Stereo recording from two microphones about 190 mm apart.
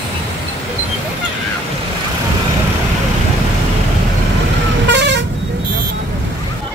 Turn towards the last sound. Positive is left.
turn(degrees=-65)  # may be behind; listen again after turning